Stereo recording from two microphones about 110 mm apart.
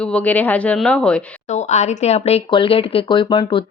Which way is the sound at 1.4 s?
90° left.